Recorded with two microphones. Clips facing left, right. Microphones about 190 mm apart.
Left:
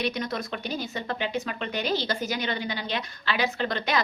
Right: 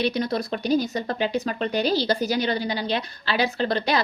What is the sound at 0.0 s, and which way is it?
Speech, 35° right (ahead or behind).